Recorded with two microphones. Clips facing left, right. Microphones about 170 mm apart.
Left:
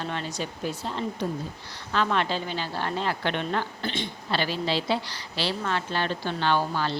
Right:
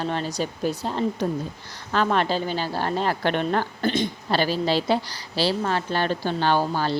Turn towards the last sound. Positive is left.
turn(degrees=-40)  # may be behind; listen again after turning